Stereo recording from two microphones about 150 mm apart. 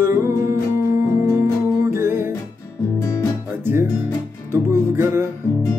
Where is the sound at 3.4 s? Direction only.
15° right (ahead or behind).